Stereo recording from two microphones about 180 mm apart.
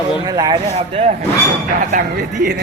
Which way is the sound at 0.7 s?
35° right (ahead or behind).